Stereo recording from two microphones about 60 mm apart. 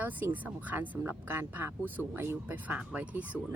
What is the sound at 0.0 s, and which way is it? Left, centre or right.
Speech, right.